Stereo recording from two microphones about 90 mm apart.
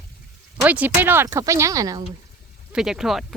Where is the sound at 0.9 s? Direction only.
25° right (ahead or behind).